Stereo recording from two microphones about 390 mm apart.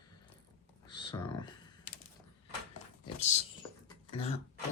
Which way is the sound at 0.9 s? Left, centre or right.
Centre.